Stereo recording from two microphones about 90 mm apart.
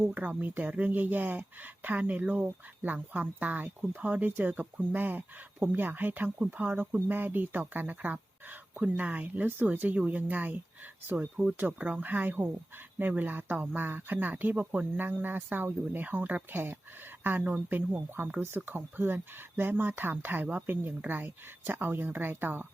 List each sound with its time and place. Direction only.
0.0 s speech: 20° right (ahead or behind)